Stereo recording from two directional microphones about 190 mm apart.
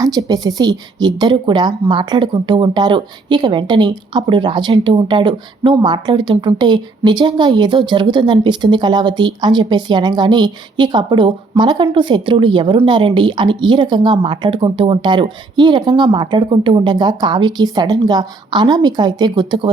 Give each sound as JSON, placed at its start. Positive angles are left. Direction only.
{"t": 0.0, "sound": "a woman's voice", "side_deg": -20}